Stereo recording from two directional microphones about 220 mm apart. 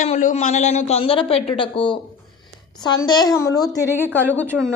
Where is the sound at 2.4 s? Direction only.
20° left (ahead or behind).